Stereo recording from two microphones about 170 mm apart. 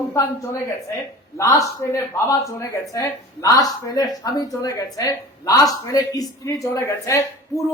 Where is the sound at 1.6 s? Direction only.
20° left (ahead or behind).